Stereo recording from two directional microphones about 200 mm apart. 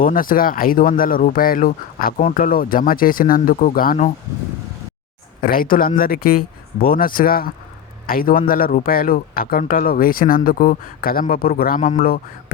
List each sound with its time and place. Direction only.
0.0 s a man's voice: 45° left (ahead or behind)
5.4 s a man's voice: 45° left (ahead or behind)